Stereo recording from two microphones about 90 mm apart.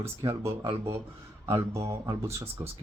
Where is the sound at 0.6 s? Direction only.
90° right.